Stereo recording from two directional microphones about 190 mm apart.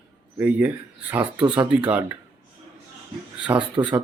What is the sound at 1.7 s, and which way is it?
Speech, 5° right (ahead or behind).